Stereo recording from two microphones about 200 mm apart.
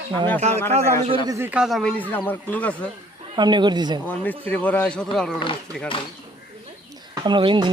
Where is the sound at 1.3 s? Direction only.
10° right (ahead or behind); by 2.7 s 10° left (ahead or behind).